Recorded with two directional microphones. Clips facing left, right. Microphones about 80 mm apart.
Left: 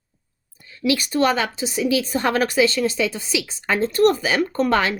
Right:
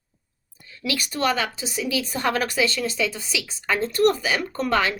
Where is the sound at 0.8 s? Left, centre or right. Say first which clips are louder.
Left 6 dB; left.